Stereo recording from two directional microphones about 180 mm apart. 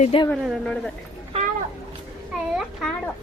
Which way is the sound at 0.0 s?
30° left (ahead or behind).